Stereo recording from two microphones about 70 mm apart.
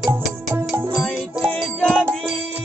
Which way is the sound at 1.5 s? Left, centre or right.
Centre.